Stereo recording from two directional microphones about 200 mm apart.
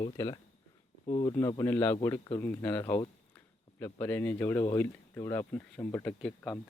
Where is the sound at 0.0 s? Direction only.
20° left (ahead or behind).